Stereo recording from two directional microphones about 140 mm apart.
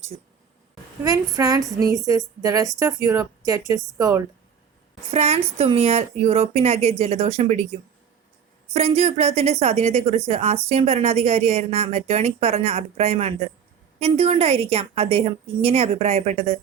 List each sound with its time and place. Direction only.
1.0 s a woman's voice: 25° right (ahead or behind)
5.1 s a woman's voice: 45° right (ahead or behind)